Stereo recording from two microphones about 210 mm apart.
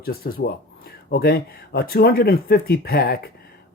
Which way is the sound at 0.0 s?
45° left (ahead or behind).